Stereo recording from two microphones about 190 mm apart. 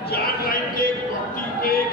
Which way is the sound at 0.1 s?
50° left (ahead or behind).